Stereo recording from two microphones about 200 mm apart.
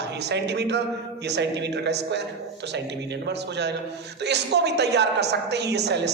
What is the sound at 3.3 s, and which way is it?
A man's voice, 60° right (ahead or behind).